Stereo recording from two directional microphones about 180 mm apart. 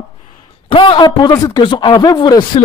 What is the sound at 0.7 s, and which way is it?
Speech, 30° left (ahead or behind).